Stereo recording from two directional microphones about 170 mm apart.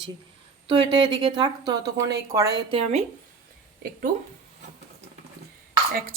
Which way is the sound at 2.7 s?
40° right (ahead or behind).